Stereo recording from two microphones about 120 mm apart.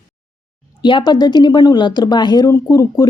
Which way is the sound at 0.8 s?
40° left (ahead or behind).